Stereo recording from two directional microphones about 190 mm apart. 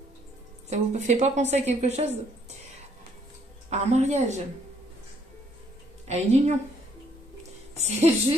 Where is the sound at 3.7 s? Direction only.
35° right (ahead or behind).